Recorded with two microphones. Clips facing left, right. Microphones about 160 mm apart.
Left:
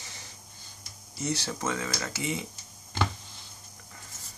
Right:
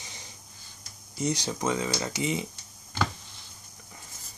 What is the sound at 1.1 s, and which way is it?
Speech, 15° right (ahead or behind).